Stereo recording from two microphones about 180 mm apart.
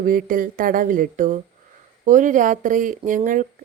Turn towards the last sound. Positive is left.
turn(degrees=-45)  # may be behind; listen again after turning